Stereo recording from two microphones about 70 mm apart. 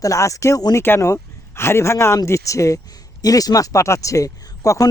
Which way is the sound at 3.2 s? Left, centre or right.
Left.